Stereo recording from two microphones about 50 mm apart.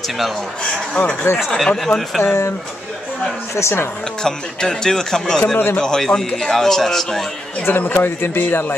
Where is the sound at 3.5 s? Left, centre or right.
Left.